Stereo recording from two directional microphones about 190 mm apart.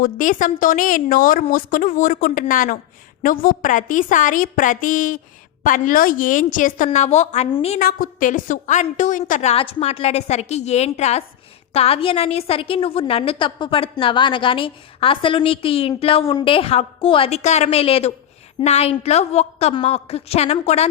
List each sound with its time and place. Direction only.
0.0 s a woman's voice: 45° left (ahead or behind)
7.8 s a woman's voice: 50° left (ahead or behind)